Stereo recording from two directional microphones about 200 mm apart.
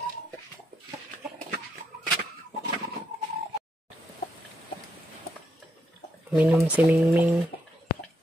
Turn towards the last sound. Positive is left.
turn(degrees=-10)  # may be behind; listen again after turning